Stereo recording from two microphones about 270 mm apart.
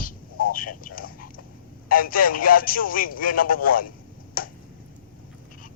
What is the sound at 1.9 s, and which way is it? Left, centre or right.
Speech, left.